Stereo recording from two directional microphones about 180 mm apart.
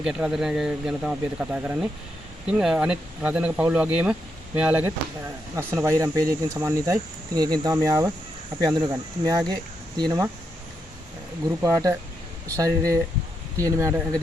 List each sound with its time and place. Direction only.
0.0 s speech: 5° right (ahead or behind); by 10.2 s 20° right (ahead or behind)
11.6 s speech: 20° right (ahead or behind)